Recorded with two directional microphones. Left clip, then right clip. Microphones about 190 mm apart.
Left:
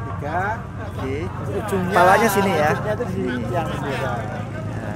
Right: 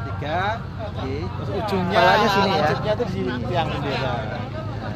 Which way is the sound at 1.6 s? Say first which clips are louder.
Even; 35° right (ahead or behind).